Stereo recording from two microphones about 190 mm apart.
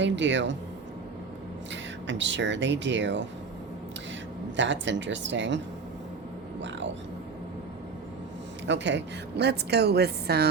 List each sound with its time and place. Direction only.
0.0 s a woman's voice: 70° right (ahead or behind)
1.7 s speech: 70° right (ahead or behind)
4.5 s a woman's voice: 70° right (ahead or behind)
6.6 s music: 70° right (ahead or behind)
8.6 s a woman's voice: 70° right (ahead or behind)